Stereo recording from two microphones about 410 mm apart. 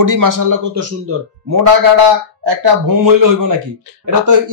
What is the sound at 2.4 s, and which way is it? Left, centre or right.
Speech, right.